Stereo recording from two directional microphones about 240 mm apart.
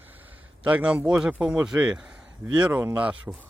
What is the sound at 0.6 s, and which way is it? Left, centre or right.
A man's voice, centre.